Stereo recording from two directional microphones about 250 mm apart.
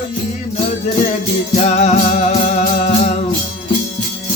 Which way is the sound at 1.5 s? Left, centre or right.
Left.